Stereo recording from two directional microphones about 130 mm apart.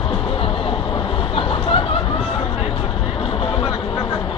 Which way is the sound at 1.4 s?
45° left (ahead or behind).